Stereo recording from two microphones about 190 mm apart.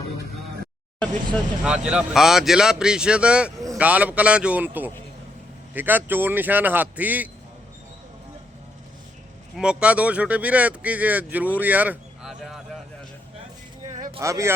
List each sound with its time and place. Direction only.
1.6 s speech: 5° right (ahead or behind)
9.6 s speech: 5° right (ahead or behind)
14.2 s speech: 15° right (ahead or behind)